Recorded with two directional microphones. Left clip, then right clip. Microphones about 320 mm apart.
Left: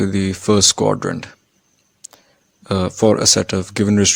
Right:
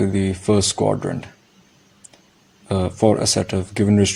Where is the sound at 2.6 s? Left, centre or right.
Left.